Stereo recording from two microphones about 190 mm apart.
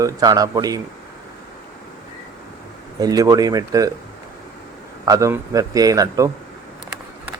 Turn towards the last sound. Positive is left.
turn(degrees=-20)  # may be behind; listen again after turning